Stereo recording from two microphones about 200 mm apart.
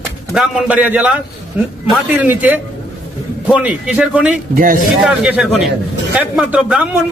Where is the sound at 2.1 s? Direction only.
10° right (ahead or behind).